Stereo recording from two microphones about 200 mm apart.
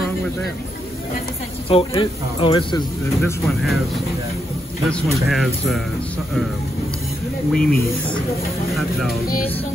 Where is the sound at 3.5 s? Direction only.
Centre (ahead or behind).